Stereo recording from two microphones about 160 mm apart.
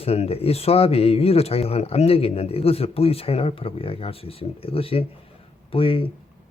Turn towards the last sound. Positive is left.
turn(degrees=35)  # may be behind; listen again after turning